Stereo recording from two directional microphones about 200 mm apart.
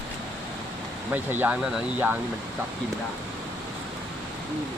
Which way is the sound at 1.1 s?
10° right (ahead or behind).